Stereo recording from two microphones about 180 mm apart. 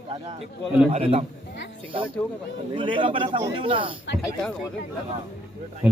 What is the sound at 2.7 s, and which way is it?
A man's voice, 25° right (ahead or behind).